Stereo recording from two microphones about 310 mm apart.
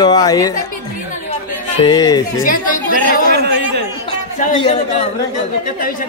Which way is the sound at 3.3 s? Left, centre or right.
Right.